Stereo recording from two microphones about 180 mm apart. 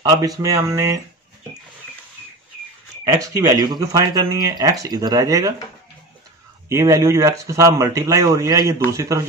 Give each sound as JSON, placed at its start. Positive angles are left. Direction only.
{"t": 0.0, "sound": "speech", "side_deg": -20}
{"t": 3.1, "sound": "speech", "side_deg": -20}
{"t": 6.7, "sound": "speech", "side_deg": -15}